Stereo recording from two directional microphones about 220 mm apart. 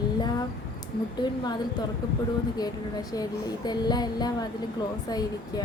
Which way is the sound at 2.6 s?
15° left (ahead or behind).